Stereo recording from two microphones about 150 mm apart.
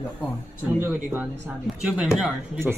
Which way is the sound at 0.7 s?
15° right (ahead or behind).